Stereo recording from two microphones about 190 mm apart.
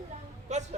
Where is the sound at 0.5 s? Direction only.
35° right (ahead or behind).